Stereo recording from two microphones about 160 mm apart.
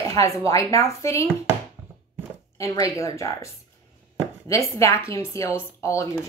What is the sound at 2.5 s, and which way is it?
Speech, 20° left (ahead or behind).